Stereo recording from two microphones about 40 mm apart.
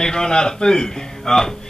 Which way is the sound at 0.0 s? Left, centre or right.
Centre.